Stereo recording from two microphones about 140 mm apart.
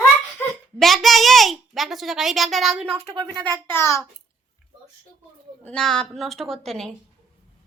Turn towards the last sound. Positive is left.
turn(degrees=5)  # may be behind; listen again after turning